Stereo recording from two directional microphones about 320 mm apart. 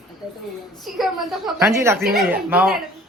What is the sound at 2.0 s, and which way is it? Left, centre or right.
Speech, right.